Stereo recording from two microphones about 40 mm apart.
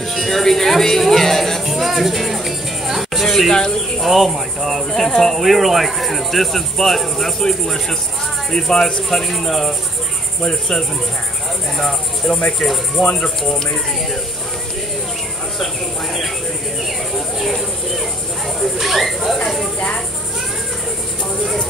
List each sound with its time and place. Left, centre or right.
0.1 s speech: centre
1.6 s music: centre
3.5 s speech: centre
4.0 s speech: centre
4.8 s speech: centre
5.4 s speech: centre
9.2 s speech: centre
10.4 s cricket: centre
11.8 s cricket: centre
12.5 s speech: centre
17.4 s cricket: centre
18.6 s a sound: centre